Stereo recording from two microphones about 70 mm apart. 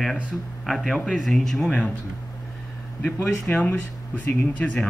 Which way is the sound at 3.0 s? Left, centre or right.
Centre.